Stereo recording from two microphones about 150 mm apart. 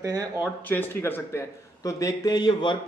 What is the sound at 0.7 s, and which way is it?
Speech, 15° left (ahead or behind).